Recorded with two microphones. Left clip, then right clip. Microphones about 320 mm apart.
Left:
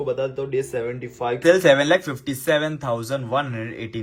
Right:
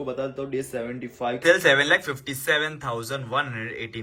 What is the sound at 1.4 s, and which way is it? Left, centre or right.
Speech, centre.